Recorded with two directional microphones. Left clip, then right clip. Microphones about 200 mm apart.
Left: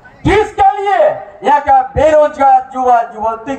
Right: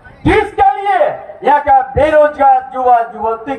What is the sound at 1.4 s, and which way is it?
A man's voice, 45° left (ahead or behind).